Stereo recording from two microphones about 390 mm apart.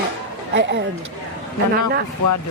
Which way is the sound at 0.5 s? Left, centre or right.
Right.